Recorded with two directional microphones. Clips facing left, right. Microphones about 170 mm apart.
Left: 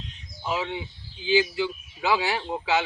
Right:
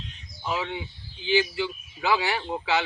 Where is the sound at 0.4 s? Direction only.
15° left (ahead or behind).